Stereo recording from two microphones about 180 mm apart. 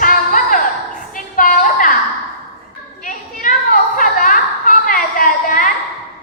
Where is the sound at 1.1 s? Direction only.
50° left (ahead or behind).